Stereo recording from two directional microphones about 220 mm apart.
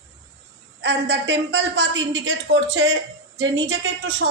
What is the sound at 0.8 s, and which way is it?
Speech, 50° right (ahead or behind).